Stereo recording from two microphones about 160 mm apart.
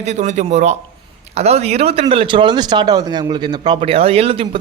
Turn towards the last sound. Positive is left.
turn(degrees=-40)  # may be behind; listen again after turning